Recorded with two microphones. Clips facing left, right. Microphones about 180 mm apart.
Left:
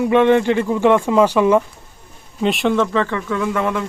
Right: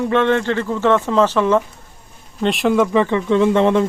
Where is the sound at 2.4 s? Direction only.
Centre (ahead or behind); by 3.8 s 30° right (ahead or behind).